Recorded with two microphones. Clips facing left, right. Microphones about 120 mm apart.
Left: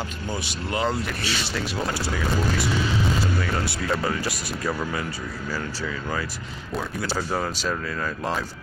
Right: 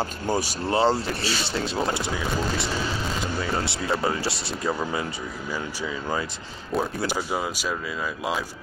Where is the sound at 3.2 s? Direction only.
20° right (ahead or behind).